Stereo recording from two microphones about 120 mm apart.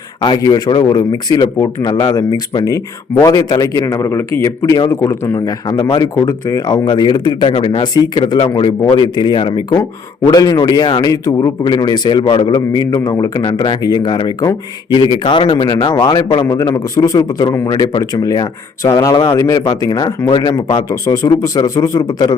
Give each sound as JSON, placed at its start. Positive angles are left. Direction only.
{"t": 0.2, "sound": "speech", "side_deg": 35}
{"t": 5.6, "sound": "speech", "side_deg": 35}
{"t": 18.0, "sound": "speech", "side_deg": 30}
{"t": 19.1, "sound": "speech", "side_deg": 45}
{"t": 19.4, "sound": "speech", "side_deg": 30}